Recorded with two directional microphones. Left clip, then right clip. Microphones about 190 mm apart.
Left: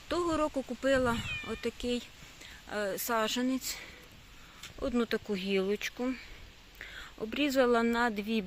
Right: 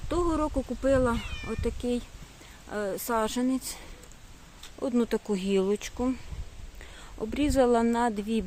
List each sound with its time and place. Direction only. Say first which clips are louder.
0.1 s a sound: right 4 dB; centre (ahead or behind)
0.4 s speech: right 3 dB; 10° left (ahead or behind)
0.9 s speech: right 3 dB; centre (ahead or behind)
4.9 s speech: right 4 dB; 10° right (ahead or behind)
7.3 s speech: right 3 dB; 10° right (ahead or behind)